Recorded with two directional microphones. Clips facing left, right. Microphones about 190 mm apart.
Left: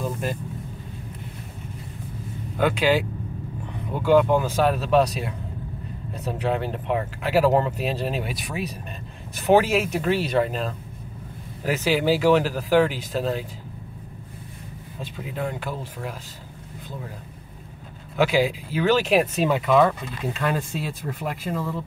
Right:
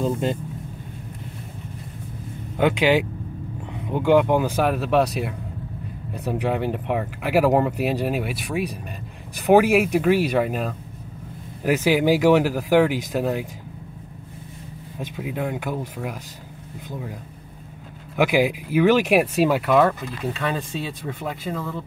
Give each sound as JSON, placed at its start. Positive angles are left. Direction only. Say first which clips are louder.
{"t": 0.0, "sound": "speech", "louder": "right 5 dB", "side_deg": -25}
{"t": 2.5, "sound": "speech", "louder": "right 2 dB", "side_deg": -20}
{"t": 15.0, "sound": "speech", "louder": "right 3 dB", "side_deg": -15}
{"t": 18.1, "sound": "speech", "louder": "right 1 dB", "side_deg": -15}